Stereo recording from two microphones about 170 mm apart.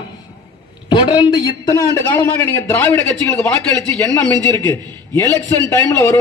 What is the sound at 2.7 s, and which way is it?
A man's voice, 15° left (ahead or behind).